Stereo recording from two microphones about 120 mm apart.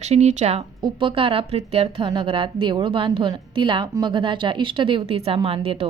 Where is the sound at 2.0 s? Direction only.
40° right (ahead or behind).